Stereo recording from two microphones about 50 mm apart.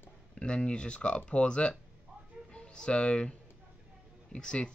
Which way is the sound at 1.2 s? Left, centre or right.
Left.